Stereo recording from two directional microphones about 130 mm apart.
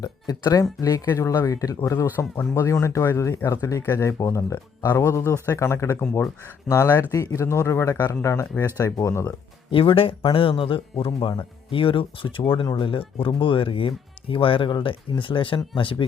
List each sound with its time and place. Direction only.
0.0 s speech: 30° left (ahead or behind)
9.6 s speech: 45° left (ahead or behind)